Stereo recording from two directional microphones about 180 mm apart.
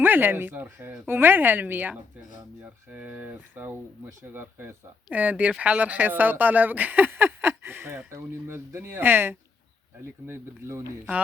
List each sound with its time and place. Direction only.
0.0 s speech: 10° right (ahead or behind)